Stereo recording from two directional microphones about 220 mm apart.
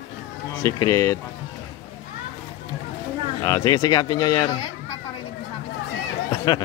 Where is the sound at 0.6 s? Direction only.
15° left (ahead or behind).